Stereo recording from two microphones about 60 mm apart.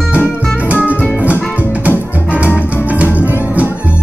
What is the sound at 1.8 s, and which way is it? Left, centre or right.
Music, right.